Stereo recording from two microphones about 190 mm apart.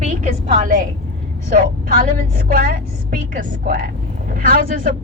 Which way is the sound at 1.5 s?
50° right (ahead or behind).